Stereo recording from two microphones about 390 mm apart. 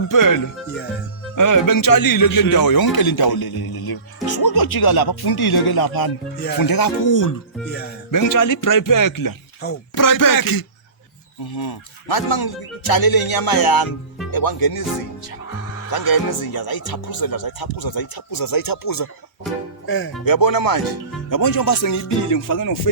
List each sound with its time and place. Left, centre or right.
0.1 s music: left
1.4 s a man's voice: left
8.1 s music: left
9.9 s a man's voice: left
15.9 s a man's voice: left
20.2 s a man's voice: left
21.2 s music: left